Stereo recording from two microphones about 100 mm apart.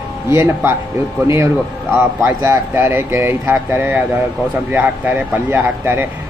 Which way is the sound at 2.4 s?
25° right (ahead or behind).